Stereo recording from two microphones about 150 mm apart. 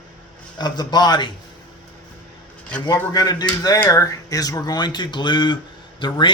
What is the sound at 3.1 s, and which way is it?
Speech, 25° left (ahead or behind).